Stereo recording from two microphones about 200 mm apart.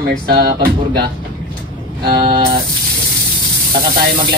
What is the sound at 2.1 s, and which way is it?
Speech, 25° right (ahead or behind).